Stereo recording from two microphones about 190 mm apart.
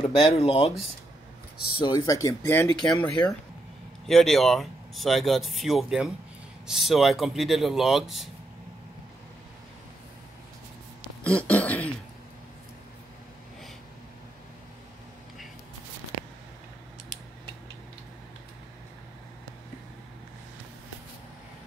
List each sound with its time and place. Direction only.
0.1 s speech: 35° left (ahead or behind)
1.8 s speech: 20° left (ahead or behind); by 8.3 s centre (ahead or behind)
11.2 s speech: 5° left (ahead or behind)